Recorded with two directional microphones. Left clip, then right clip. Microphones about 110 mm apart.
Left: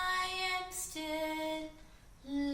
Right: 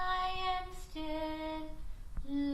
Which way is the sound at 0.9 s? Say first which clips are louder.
Left 1 dB; 15° left (ahead or behind).